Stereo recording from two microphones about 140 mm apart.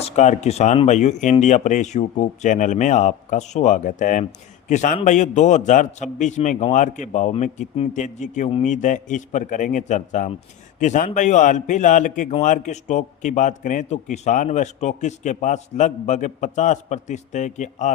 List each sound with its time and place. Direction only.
0.2 s a man's voice: 55° left (ahead or behind)